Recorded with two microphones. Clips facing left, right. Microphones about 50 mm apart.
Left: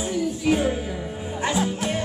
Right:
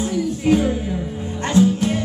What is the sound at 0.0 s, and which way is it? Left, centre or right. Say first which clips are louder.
Music: right 3 dB; centre.